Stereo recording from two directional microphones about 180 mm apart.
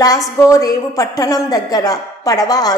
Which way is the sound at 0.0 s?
20° left (ahead or behind).